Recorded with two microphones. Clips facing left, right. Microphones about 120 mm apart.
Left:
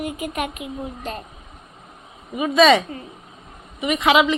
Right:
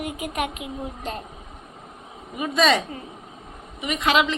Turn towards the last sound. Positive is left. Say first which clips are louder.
# left 4 dB
turn(degrees=10)  # may be behind; listen again after turning